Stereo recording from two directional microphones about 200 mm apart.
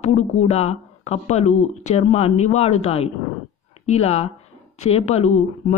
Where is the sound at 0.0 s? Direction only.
35° left (ahead or behind).